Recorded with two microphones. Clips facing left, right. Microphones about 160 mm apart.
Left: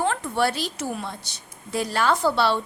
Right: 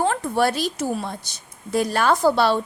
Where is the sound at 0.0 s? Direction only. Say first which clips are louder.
Right 3 dB; 40° right (ahead or behind).